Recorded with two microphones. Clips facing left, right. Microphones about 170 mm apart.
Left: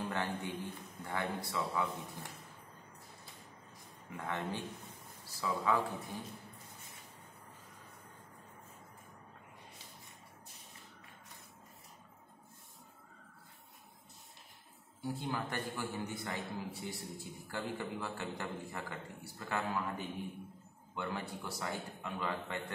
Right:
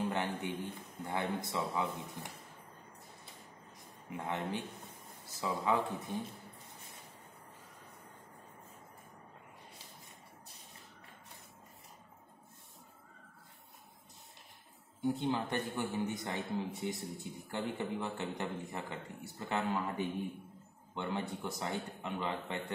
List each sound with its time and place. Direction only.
0.1 s a man's voice: 20° right (ahead or behind)
4.1 s a man's voice: 15° right (ahead or behind)
15.0 s a man's voice: 20° right (ahead or behind)
20.9 s a man's voice: 20° right (ahead or behind)